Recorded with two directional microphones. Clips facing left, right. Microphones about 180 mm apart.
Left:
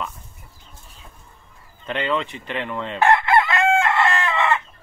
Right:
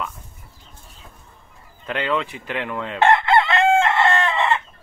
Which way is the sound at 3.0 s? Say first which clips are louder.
Right 1 dB; 25° right (ahead or behind).